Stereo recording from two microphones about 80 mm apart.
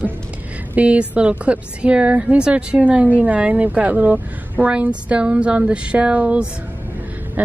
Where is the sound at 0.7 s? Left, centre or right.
Centre.